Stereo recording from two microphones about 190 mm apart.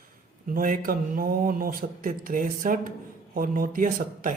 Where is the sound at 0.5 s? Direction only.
50° right (ahead or behind).